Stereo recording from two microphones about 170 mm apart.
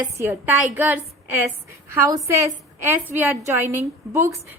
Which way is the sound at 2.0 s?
20° right (ahead or behind).